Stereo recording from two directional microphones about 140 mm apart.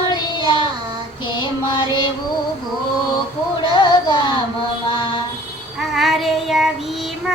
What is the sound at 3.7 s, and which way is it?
Music, 35° left (ahead or behind).